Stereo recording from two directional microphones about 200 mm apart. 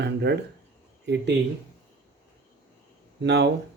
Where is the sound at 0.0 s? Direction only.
55° right (ahead or behind).